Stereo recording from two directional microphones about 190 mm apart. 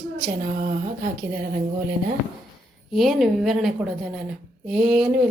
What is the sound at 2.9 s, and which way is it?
A woman's voice, centre (ahead or behind).